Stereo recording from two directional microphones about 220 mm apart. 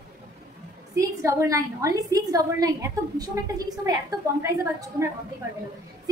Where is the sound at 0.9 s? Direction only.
15° right (ahead or behind).